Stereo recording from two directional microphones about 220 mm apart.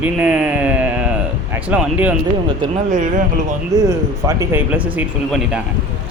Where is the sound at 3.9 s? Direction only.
15° right (ahead or behind).